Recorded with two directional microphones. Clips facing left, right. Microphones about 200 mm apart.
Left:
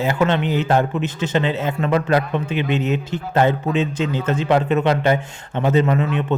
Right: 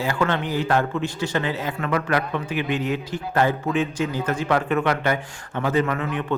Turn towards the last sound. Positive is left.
turn(degrees=20)  # may be behind; listen again after turning